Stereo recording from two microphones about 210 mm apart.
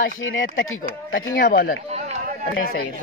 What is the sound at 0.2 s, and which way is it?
Speech, 65° left (ahead or behind).